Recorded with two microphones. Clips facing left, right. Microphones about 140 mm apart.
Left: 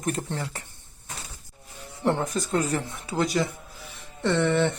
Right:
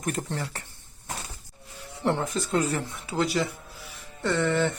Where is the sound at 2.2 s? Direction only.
45° left (ahead or behind).